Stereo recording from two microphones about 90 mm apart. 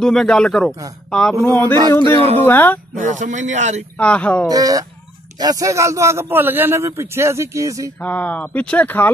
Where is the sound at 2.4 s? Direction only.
25° left (ahead or behind).